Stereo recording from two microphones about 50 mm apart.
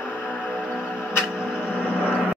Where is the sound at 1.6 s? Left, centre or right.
Right.